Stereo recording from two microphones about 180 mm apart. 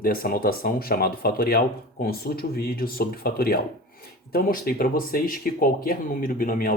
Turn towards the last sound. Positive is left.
turn(degrees=50)  # may be behind; listen again after turning